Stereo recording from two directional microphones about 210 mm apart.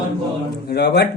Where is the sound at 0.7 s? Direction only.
50° left (ahead or behind).